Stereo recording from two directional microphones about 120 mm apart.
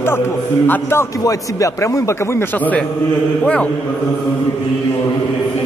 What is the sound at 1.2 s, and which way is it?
A man's voice, 25° left (ahead or behind).